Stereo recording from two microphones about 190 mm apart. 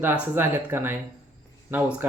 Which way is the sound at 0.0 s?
10° right (ahead or behind).